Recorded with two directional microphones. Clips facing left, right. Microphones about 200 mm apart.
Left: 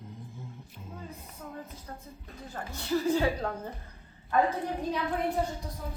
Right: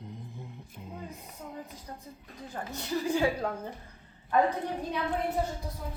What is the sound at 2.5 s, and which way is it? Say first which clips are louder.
Speech: left 3 dB; 15° right (ahead or behind).